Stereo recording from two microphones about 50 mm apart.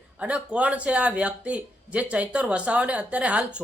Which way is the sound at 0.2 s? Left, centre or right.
Right.